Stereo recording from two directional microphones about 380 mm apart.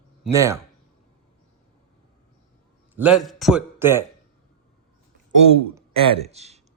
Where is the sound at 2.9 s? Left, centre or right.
Centre.